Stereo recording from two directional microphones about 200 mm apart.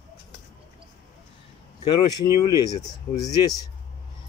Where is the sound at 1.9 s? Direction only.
25° left (ahead or behind).